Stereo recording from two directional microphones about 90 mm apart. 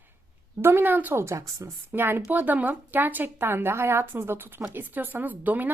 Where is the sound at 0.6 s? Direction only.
25° right (ahead or behind).